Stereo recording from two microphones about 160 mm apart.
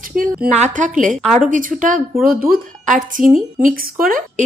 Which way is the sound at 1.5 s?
55° right (ahead or behind).